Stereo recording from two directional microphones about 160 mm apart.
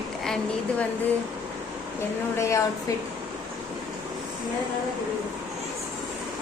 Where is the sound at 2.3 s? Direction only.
20° left (ahead or behind).